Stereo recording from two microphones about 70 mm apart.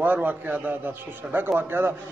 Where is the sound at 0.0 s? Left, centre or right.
Right.